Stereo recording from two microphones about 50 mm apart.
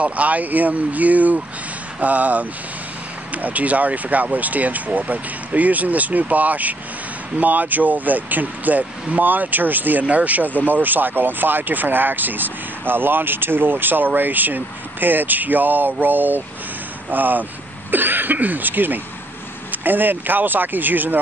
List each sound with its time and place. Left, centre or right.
0.0 s speech: right